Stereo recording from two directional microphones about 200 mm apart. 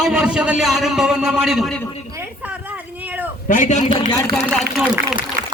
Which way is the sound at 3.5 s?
40° left (ahead or behind).